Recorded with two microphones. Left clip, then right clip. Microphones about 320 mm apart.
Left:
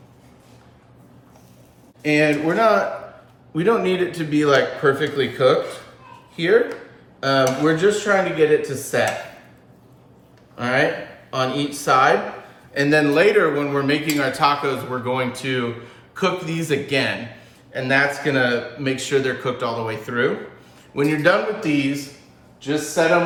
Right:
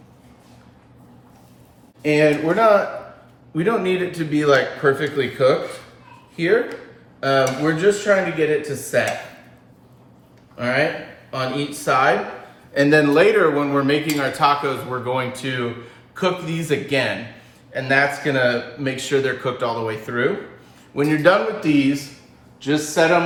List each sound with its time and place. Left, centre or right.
2.0 s speech: centre
10.6 s speech: centre
12.7 s speech: centre
22.6 s speech: right